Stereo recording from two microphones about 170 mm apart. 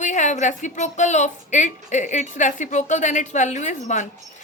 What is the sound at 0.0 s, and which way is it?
A woman's voice, 45° left (ahead or behind).